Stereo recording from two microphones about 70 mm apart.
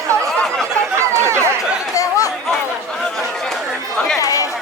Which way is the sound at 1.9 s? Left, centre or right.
Left.